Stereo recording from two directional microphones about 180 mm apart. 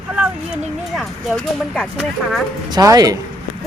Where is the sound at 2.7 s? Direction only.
20° right (ahead or behind).